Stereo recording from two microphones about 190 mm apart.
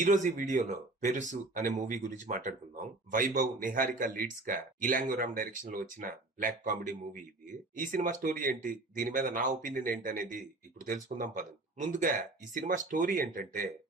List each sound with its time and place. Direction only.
0.0 s speech: 40° right (ahead or behind)